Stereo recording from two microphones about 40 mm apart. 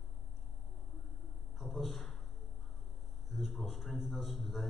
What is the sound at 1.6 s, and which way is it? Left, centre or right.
Speech, centre.